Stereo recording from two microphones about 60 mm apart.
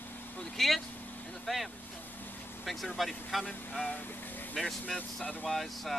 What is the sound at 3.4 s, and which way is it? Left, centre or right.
Speech, centre.